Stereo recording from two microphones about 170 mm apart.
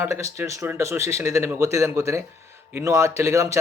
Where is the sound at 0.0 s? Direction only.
15° right (ahead or behind).